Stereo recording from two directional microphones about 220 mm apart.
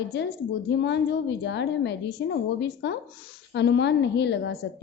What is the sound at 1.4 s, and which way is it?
A woman's voice, 50° left (ahead or behind).